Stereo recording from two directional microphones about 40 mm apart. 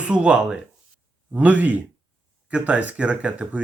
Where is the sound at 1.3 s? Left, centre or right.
Right.